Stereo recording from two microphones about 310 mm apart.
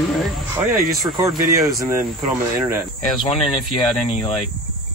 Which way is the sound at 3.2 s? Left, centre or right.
Centre.